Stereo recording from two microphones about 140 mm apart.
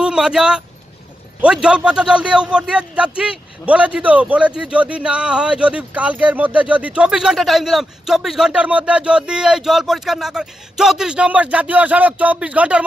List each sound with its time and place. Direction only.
0.0 s a man's voice: 5° right (ahead or behind)